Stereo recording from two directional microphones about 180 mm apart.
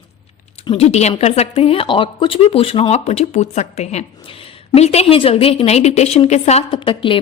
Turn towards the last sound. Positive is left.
turn(degrees=30)  # may be behind; listen again after turning